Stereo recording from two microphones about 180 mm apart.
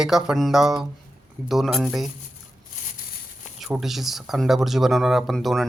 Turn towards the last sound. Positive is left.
turn(degrees=0)  # may be behind; listen again after turning